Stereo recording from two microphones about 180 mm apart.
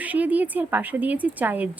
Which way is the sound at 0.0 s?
10° right (ahead or behind).